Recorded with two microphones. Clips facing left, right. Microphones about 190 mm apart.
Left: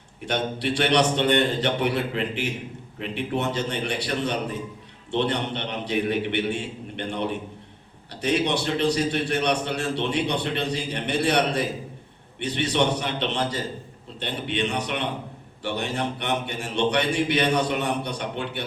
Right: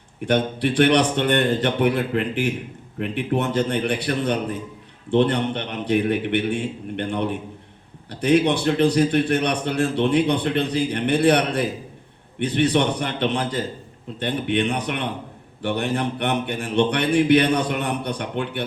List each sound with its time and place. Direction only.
0.3 s a man's voice: 55° right (ahead or behind)